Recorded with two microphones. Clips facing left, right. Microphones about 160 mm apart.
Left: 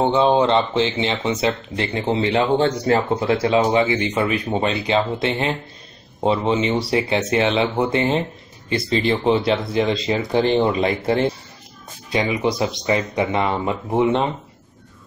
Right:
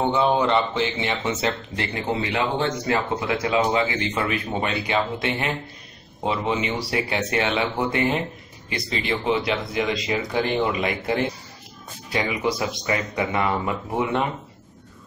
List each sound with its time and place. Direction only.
0.0 s speech: 25° left (ahead or behind)